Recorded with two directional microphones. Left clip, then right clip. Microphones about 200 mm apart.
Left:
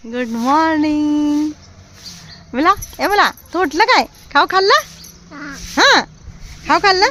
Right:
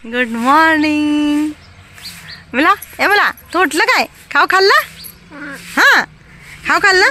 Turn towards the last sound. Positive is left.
turn(degrees=0)  # may be behind; listen again after turning